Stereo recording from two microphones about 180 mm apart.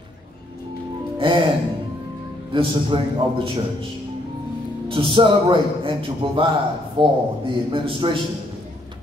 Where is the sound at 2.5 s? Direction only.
30° right (ahead or behind).